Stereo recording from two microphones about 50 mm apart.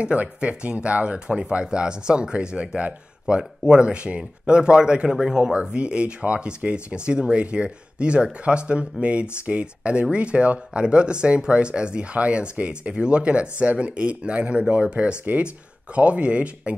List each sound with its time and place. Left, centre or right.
0.0 s speech: right